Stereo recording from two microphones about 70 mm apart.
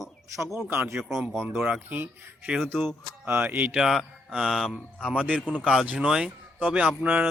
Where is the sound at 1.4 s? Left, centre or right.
Right.